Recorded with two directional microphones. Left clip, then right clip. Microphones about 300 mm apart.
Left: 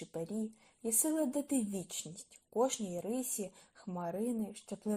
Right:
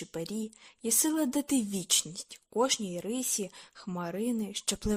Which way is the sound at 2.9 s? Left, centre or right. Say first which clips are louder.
Right 4 dB; right.